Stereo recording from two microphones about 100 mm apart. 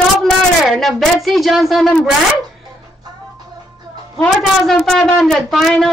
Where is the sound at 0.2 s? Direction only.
Centre (ahead or behind).